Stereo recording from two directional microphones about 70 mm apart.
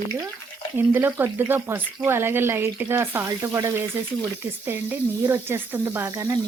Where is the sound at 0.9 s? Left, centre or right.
Right.